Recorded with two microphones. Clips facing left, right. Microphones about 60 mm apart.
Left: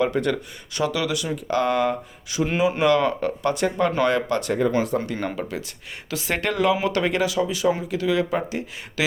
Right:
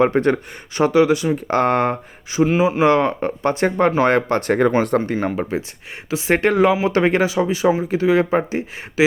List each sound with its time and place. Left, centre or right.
0.0 s speech: right
2.5 s speech: centre
2.8 s speech: right
5.4 s speech: right